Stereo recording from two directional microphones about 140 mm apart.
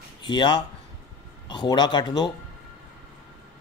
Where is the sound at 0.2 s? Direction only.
30° left (ahead or behind).